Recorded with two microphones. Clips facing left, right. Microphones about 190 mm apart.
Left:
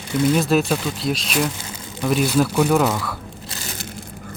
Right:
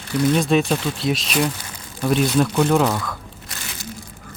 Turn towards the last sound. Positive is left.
turn(degrees=5)  # may be behind; listen again after turning